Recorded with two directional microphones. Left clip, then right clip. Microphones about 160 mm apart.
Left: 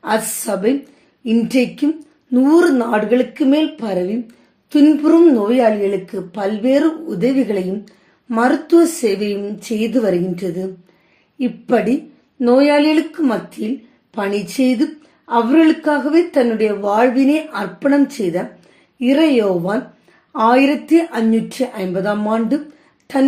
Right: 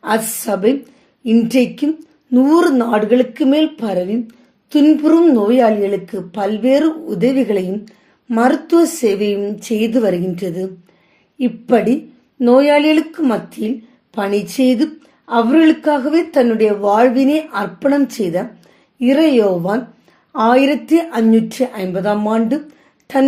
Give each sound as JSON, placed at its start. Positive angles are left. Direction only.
{"t": 0.3, "sound": "a woman's voice", "side_deg": -30}